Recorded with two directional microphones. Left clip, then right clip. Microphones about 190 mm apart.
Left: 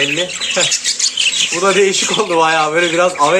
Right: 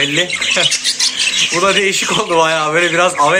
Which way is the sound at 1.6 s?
5° left (ahead or behind).